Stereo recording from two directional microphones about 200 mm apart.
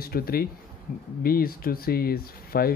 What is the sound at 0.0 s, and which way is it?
Speech, 50° left (ahead or behind).